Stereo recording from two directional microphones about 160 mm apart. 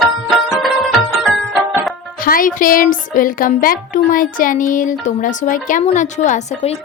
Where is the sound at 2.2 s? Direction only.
60° left (ahead or behind).